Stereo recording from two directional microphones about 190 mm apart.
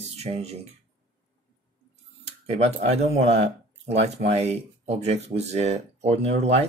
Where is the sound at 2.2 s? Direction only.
35° right (ahead or behind).